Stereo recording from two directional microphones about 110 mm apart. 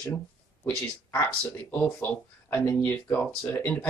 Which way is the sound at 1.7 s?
15° left (ahead or behind).